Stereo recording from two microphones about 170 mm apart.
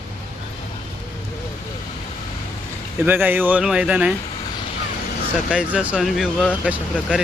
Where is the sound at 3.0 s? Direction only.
10° right (ahead or behind).